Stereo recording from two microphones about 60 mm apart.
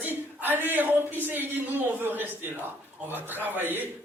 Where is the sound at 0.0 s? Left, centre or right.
Right.